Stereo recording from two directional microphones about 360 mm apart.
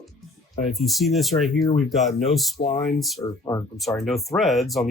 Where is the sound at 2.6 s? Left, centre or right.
Centre.